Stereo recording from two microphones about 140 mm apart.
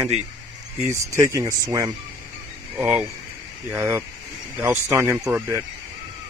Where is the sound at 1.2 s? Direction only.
25° right (ahead or behind).